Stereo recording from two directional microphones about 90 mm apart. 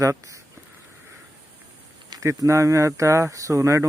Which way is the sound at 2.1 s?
40° right (ahead or behind).